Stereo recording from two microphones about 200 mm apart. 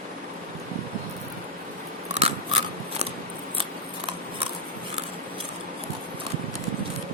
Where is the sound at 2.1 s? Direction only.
30° right (ahead or behind).